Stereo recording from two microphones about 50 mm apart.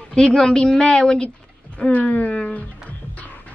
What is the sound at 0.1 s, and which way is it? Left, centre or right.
A woman's voice, centre.